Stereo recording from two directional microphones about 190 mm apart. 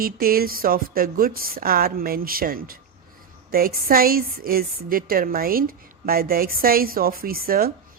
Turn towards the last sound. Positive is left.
turn(degrees=-50)  # may be behind; listen again after turning